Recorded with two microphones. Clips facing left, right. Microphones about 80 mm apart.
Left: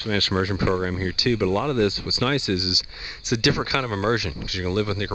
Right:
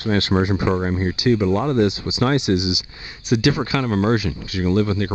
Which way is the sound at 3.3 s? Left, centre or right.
Centre.